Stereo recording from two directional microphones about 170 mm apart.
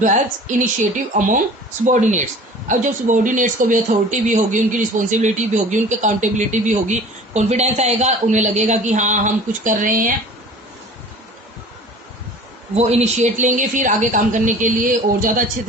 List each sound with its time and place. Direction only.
0.0 s speech: 45° right (ahead or behind)
1.8 s speech: 45° right (ahead or behind)
12.7 s speech: 40° right (ahead or behind)